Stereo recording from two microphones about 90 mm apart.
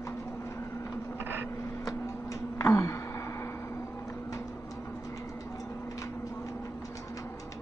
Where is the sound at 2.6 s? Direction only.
35° left (ahead or behind).